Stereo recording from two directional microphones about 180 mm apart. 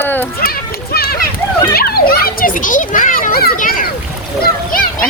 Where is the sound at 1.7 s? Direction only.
55° left (ahead or behind).